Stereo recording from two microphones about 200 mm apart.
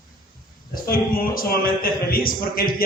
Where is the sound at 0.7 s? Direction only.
45° left (ahead or behind).